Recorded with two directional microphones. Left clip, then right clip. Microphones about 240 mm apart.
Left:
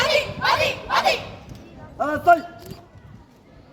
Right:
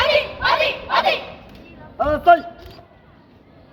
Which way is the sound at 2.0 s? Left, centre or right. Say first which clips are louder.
Right 3 dB; right.